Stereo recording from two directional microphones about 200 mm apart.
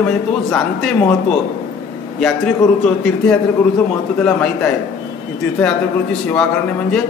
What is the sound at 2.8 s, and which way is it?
A man's voice, 5° left (ahead or behind).